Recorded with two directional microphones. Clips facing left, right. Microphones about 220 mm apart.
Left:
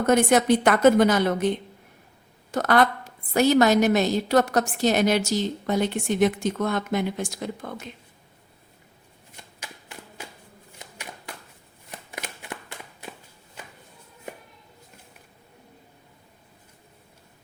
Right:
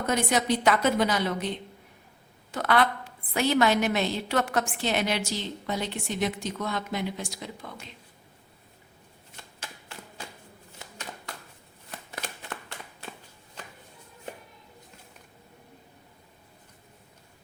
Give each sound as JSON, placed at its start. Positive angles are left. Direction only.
{"t": 0.0, "sound": "a woman's voice", "side_deg": 55}
{"t": 11.9, "sound": "shuffling cards", "side_deg": 15}